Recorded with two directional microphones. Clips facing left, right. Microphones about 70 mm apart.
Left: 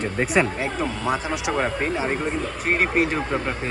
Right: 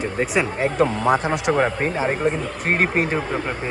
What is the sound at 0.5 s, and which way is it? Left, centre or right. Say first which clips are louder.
Speech: right 6 dB; right.